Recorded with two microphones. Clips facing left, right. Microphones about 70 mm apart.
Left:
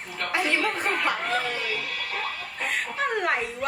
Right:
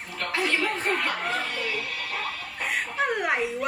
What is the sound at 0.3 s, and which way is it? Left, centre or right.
Chuckle, left.